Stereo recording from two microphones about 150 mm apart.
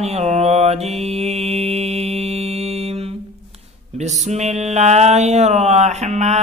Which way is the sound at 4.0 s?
50° right (ahead or behind).